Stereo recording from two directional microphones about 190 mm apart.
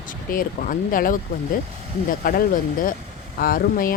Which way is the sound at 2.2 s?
50° left (ahead or behind).